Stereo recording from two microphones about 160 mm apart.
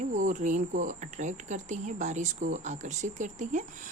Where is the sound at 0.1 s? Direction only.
50° right (ahead or behind).